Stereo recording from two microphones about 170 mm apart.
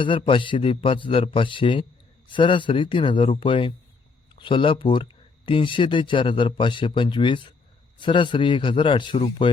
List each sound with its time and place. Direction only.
0.0 s a man's voice: 30° left (ahead or behind)